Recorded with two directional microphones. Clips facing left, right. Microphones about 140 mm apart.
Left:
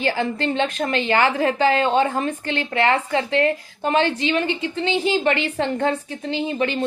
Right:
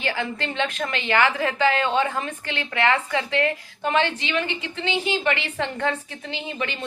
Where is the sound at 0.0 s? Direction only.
35° left (ahead or behind).